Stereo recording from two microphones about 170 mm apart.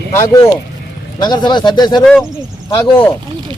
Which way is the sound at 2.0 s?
5° left (ahead or behind).